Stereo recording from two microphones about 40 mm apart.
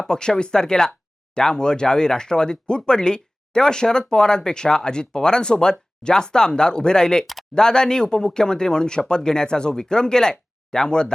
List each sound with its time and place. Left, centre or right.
0.1 s speech: centre